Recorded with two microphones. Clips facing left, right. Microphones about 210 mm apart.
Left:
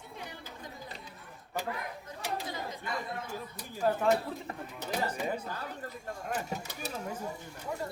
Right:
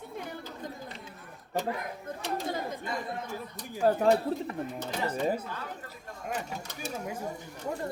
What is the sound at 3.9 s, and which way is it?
Speech, 40° right (ahead or behind).